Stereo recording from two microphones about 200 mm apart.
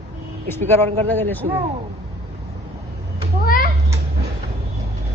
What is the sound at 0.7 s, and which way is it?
Speech, 10° left (ahead or behind).